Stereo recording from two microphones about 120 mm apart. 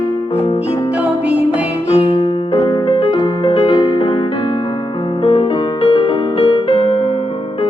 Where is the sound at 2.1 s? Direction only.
45° left (ahead or behind).